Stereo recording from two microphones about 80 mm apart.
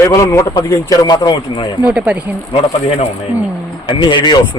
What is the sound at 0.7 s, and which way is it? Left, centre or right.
Speech, left.